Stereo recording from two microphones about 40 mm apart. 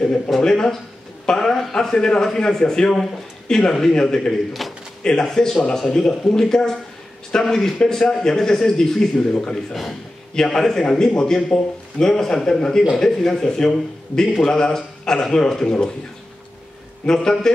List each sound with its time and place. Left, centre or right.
0.4 s a man's voice: centre
4.6 s a sound: centre
5.0 s a man's voice: centre
17.0 s a man's voice: centre